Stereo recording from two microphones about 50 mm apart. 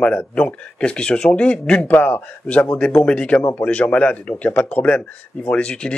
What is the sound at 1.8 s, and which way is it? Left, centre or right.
Speech, left.